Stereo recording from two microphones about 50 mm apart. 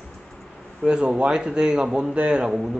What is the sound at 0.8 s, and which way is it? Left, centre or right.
A man's voice, centre.